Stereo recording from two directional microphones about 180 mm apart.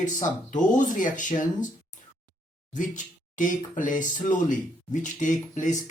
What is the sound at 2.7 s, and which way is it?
Speech, 45° left (ahead or behind).